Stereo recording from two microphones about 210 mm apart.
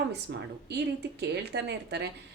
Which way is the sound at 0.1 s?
55° right (ahead or behind).